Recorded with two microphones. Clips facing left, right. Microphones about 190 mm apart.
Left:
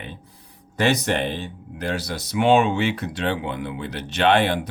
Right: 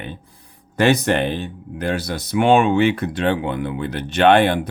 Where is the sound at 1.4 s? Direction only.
55° right (ahead or behind).